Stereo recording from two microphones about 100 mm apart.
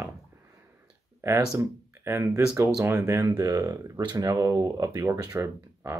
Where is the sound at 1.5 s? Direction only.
25° right (ahead or behind).